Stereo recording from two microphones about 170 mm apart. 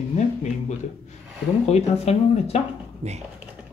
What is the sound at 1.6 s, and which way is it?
Speech, 40° left (ahead or behind).